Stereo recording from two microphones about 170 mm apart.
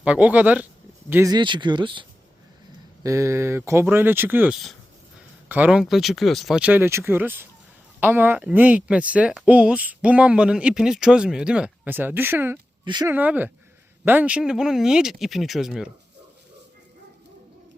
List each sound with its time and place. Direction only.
0.0 s speech: 10° right (ahead or behind)
1.4 s speech: 25° right (ahead or behind)
3.0 s speech: 15° right (ahead or behind)
12.8 s speech: 25° right (ahead or behind)
13.1 s speech: 10° right (ahead or behind)